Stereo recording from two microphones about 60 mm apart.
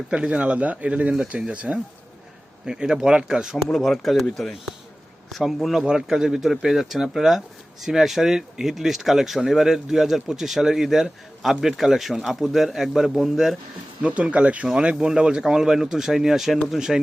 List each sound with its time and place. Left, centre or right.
0.1 s speech: centre
3.7 s speech: centre
14.0 s speech: right